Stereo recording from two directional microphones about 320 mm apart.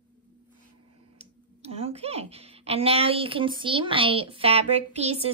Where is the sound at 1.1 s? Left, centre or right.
Centre.